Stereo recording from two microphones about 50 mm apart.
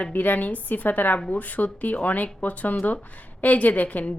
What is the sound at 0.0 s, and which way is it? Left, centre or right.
A woman's voice, left.